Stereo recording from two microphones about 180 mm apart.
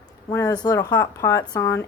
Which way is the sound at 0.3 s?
20° left (ahead or behind).